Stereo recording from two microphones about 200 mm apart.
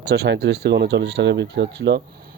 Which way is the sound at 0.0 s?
55° right (ahead or behind).